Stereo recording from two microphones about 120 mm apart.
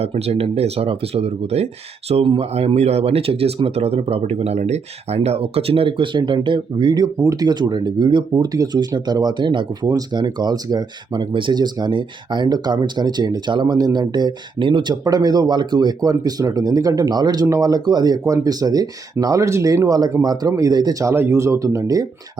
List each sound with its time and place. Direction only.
0.0 s speech: 60° right (ahead or behind); by 22.0 s 30° right (ahead or behind)